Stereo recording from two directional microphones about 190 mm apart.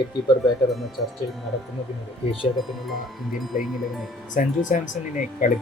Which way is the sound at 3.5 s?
45° left (ahead or behind).